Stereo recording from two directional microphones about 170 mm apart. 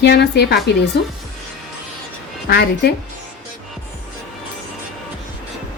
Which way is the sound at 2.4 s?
80° left.